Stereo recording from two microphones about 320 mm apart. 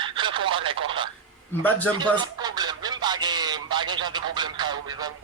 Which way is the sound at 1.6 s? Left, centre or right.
Centre.